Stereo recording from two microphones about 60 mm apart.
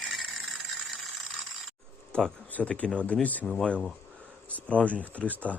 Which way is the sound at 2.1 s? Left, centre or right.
Centre.